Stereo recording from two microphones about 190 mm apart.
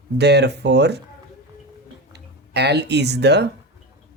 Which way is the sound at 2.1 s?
60° right (ahead or behind).